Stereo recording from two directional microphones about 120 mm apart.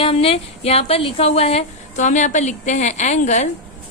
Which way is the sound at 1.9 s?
85° left.